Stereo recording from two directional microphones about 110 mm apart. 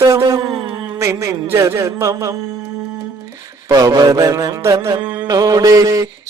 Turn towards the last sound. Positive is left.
turn(degrees=-30)  # may be behind; listen again after turning